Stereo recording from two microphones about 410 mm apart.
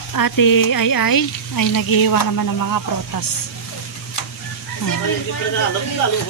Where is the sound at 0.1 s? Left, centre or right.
Left.